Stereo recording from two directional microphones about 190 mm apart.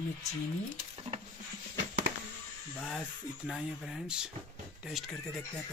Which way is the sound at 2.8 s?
Centre (ahead or behind).